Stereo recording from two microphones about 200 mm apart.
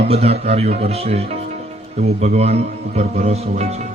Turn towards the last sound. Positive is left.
turn(degrees=-35)  # may be behind; listen again after turning